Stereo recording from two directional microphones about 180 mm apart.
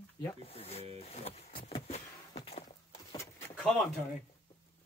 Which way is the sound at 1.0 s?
35° left (ahead or behind).